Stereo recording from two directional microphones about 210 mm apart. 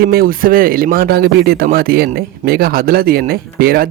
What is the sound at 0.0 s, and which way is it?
Speech, 45° right (ahead or behind).